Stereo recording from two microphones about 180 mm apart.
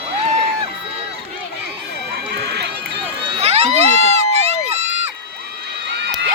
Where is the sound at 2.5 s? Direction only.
65° right (ahead or behind).